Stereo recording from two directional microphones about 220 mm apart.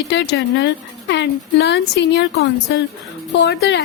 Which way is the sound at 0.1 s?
50° left (ahead or behind).